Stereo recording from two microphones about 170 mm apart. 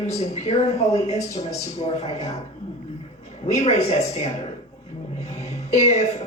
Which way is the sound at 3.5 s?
40° left (ahead or behind).